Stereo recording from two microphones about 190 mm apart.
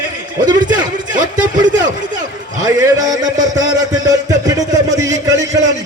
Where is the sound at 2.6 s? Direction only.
20° right (ahead or behind).